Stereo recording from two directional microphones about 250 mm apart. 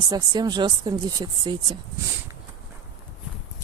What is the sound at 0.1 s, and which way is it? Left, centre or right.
Speech, centre.